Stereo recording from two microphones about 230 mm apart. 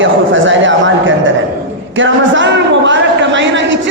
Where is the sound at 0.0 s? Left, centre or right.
Right.